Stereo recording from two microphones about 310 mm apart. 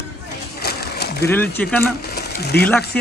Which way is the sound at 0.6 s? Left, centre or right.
Left.